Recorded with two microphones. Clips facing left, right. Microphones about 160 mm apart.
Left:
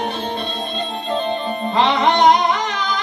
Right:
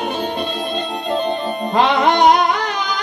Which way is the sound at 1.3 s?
45° right (ahead or behind).